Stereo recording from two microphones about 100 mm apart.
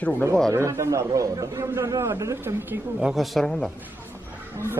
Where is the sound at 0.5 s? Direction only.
30° right (ahead or behind).